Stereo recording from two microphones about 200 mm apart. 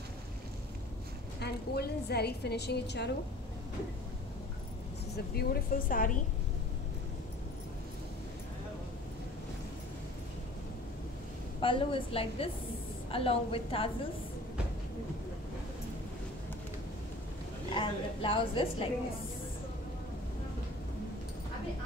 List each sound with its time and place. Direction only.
1.4 s a woman's voice: 55° left (ahead or behind)
5.1 s a woman's voice: 50° left (ahead or behind)
11.6 s a woman's voice: 25° left (ahead or behind)
17.7 s a woman's voice: 25° left (ahead or behind)